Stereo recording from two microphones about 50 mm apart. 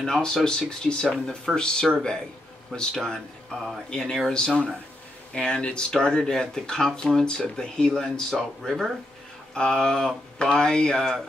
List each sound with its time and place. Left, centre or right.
0.0 s speech: centre